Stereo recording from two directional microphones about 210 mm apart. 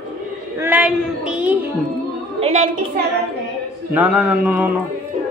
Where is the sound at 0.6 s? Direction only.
5° right (ahead or behind).